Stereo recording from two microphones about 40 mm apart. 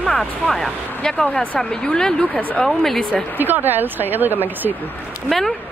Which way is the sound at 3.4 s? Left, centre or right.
Right.